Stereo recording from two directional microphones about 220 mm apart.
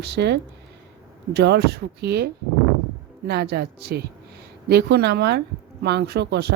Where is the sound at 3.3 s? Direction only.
50° right (ahead or behind).